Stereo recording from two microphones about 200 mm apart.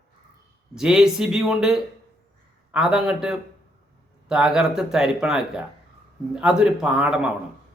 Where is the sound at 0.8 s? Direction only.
Centre (ahead or behind).